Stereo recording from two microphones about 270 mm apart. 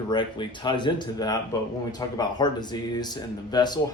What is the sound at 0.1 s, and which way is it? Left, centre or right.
Speech, centre.